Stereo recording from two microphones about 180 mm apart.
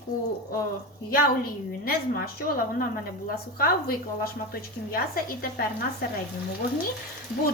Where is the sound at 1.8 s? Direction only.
55° left (ahead or behind).